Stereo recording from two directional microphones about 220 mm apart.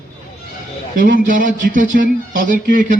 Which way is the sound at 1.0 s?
40° right (ahead or behind).